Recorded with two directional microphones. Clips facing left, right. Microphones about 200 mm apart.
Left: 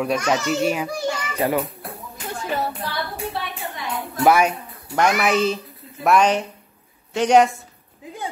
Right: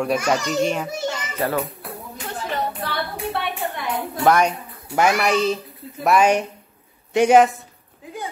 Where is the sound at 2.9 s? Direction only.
60° right (ahead or behind).